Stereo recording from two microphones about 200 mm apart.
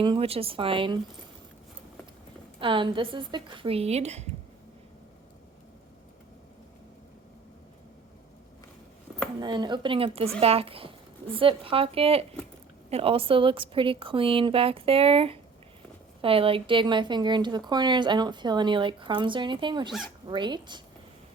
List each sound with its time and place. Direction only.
0.0 s speech: 25° right (ahead or behind)
2.6 s speech: 25° right (ahead or behind)
9.4 s speech: 20° right (ahead or behind)